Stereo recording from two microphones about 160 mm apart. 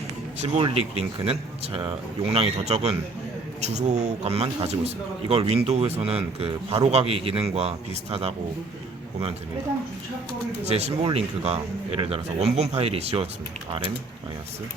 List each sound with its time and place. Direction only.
0.3 s speech: 45° right (ahead or behind)
10.6 s speech: 40° right (ahead or behind)